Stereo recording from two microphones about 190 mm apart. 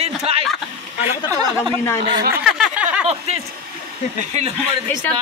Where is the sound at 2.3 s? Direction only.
Centre (ahead or behind).